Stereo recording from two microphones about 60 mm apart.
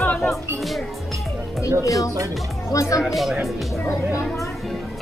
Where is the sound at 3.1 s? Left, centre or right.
Centre.